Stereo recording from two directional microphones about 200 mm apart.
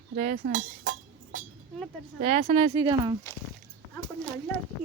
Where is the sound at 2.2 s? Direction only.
40° right (ahead or behind).